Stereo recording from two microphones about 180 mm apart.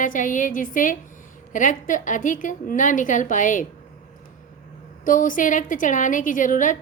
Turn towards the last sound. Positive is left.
turn(degrees=45)  # may be behind; listen again after turning